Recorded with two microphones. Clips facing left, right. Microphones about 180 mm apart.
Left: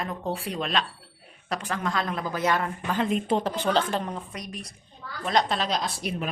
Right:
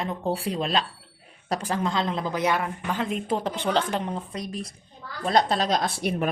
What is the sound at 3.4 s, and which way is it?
A woman's voice, 20° right (ahead or behind).